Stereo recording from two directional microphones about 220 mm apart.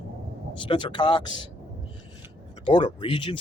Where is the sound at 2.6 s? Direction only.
20° left (ahead or behind).